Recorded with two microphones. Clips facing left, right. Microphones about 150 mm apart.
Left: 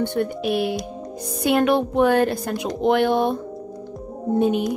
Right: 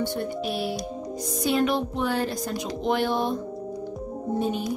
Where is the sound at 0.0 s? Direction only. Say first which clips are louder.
Left 5 dB; 60° left (ahead or behind).